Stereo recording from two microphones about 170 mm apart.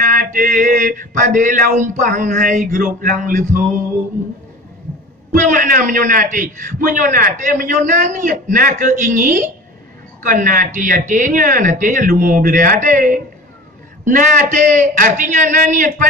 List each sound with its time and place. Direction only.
0.0 s a man's voice: 50° right (ahead or behind)
5.3 s a man's voice: 50° right (ahead or behind)